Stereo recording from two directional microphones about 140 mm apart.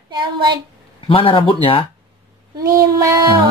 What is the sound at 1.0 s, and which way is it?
Speech, 40° left (ahead or behind).